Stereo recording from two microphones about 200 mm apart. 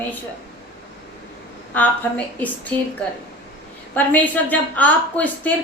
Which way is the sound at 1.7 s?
5° left (ahead or behind).